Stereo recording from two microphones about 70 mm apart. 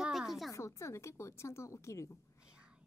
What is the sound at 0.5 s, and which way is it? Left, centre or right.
A woman's voice, left.